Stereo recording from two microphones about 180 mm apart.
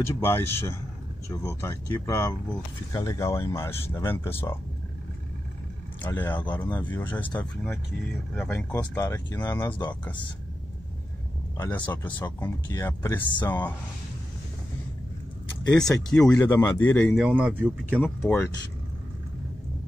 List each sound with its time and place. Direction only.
0.0 s speech: 15° left (ahead or behind)
6.0 s speech: 10° left (ahead or behind)
11.5 s speech: 15° left (ahead or behind)
16.1 s speech: 5° left (ahead or behind)
18.0 s speech: 10° left (ahead or behind)